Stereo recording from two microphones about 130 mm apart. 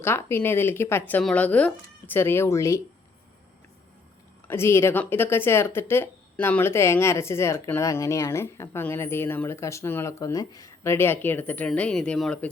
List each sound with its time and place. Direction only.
0.0 s speech: 20° left (ahead or behind)
4.4 s speech: 20° left (ahead or behind)